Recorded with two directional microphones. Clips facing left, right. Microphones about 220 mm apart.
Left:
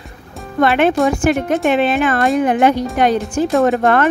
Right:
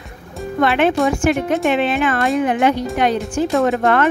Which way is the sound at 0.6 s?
45° left (ahead or behind).